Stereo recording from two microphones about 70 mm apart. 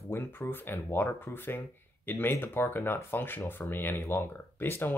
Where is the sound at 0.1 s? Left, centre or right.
Left.